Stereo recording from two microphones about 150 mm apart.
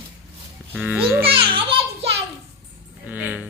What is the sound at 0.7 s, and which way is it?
Speech, 10° right (ahead or behind).